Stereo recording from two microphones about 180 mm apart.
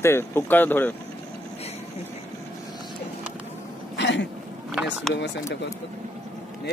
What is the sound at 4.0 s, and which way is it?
Throat clearing, 75° left (ahead or behind).